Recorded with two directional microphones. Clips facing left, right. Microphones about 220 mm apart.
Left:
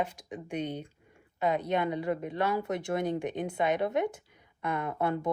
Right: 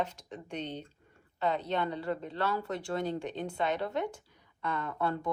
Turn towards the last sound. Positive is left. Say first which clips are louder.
# left 3 dB
turn(degrees=20)  # may be behind; listen again after turning